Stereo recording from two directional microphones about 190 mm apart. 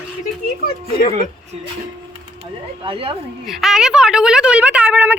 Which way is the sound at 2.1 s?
30° right (ahead or behind).